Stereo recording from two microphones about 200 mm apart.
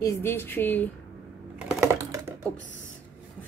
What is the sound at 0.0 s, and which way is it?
Speech, 15° left (ahead or behind).